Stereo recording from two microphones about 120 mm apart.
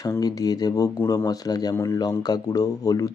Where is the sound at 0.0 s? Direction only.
30° left (ahead or behind).